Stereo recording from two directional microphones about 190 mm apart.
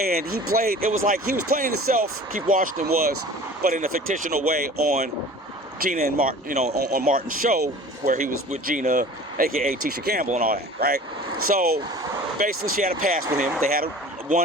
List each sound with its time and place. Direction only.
0.0 s speech: 50° right (ahead or behind)
12.8 s speech: 50° right (ahead or behind)